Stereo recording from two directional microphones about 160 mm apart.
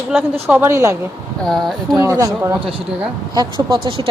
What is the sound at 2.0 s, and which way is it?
Speech, 20° right (ahead or behind).